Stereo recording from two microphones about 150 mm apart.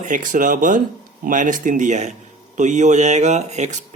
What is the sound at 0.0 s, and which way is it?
Speech, 60° right (ahead or behind).